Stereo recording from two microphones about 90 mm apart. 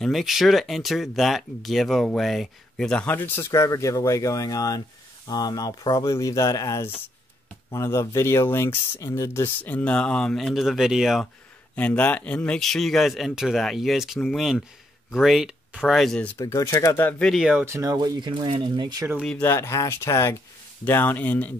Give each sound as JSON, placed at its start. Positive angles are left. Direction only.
{"t": 0.0, "sound": "speech", "side_deg": 0}
{"t": 3.1, "sound": "speech", "side_deg": 20}
{"t": 11.7, "sound": "speech", "side_deg": 15}
{"t": 12.5, "sound": "speech", "side_deg": 0}
{"t": 16.0, "sound": "speech", "side_deg": 5}
{"t": 16.5, "sound": "speech", "side_deg": 40}
{"t": 17.2, "sound": "speech", "side_deg": 0}
{"t": 17.6, "sound": "speech", "side_deg": -35}
{"t": 17.9, "sound": "speech", "side_deg": -50}
{"t": 19.4, "sound": "speech", "side_deg": 30}